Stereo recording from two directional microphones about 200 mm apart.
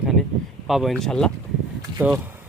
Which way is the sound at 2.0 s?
10° right (ahead or behind).